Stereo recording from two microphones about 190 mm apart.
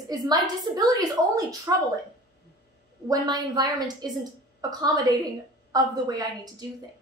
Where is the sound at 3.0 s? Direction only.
20° right (ahead or behind).